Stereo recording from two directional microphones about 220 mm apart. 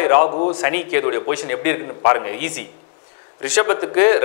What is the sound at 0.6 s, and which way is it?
A man's voice, 15° left (ahead or behind).